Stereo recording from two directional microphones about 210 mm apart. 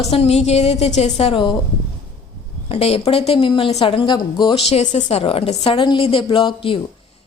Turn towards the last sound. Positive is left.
turn(degrees=25)  # may be behind; listen again after turning